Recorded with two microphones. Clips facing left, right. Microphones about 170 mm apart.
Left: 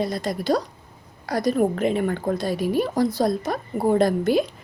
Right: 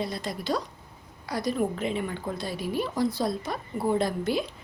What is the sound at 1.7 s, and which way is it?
A woman's voice, 55° left (ahead or behind).